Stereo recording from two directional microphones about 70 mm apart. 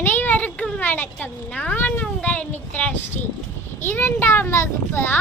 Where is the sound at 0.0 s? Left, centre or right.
Left.